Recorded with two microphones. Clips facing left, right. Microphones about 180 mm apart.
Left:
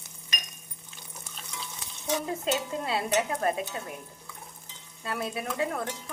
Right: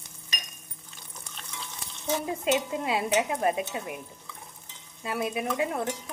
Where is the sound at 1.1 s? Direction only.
5° left (ahead or behind).